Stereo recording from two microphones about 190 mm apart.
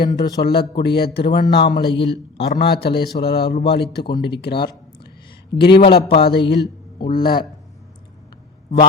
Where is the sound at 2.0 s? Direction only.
60° left (ahead or behind).